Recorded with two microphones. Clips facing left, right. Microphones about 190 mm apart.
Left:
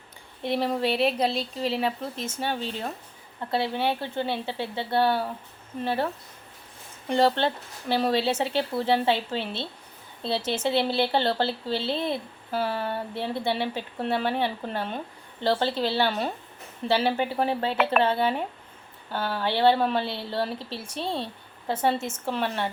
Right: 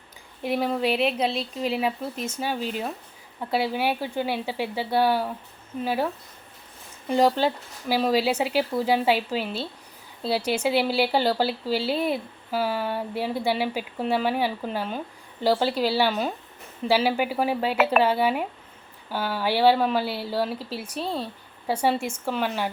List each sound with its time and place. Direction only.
0.4 s speech: 5° right (ahead or behind)
1.3 s speech: 35° left (ahead or behind)
2.4 s speech: 5° right (ahead or behind)
7.1 s speech: 5° right (ahead or behind)